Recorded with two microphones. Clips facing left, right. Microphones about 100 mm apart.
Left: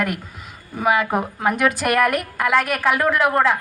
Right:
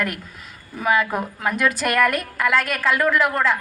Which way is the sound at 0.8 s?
20° left (ahead or behind).